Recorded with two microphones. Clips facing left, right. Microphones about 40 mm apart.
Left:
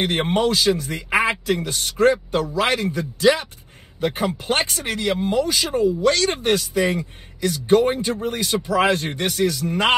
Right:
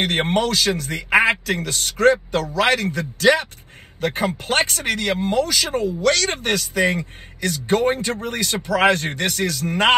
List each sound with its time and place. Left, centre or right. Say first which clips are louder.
0.0 s a man's voice: even; right